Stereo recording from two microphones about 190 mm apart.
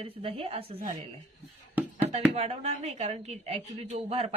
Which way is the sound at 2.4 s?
35° right (ahead or behind).